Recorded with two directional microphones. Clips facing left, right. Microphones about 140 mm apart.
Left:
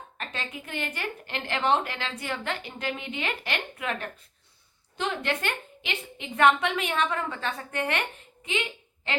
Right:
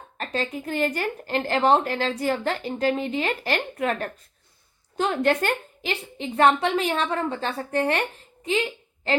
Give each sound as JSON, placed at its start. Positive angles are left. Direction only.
{"t": 0.2, "sound": "a woman's voice", "side_deg": -35}
{"t": 9.1, "sound": "a woman's voice", "side_deg": -35}